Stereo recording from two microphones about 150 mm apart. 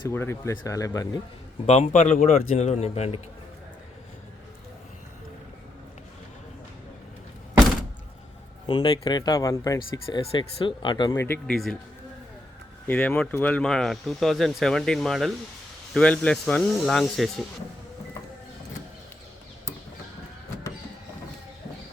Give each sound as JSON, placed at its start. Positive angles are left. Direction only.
{"t": 0.1, "sound": "speech", "side_deg": 15}
{"t": 1.6, "sound": "a man's voice", "side_deg": 50}
{"t": 8.6, "sound": "speech", "side_deg": 30}
{"t": 11.1, "sound": "speech", "side_deg": 15}
{"t": 11.5, "sound": "speech", "side_deg": 5}
{"t": 12.9, "sound": "speech", "side_deg": 10}